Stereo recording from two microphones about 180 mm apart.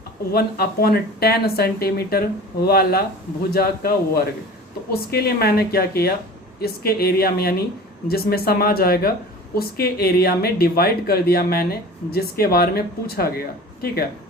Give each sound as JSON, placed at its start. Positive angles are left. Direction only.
{"t": 0.3, "sound": "speech", "side_deg": 55}